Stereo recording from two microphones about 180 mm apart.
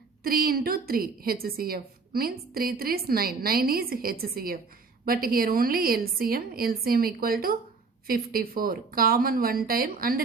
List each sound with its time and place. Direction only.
0.2 s a woman's voice: 55° right (ahead or behind)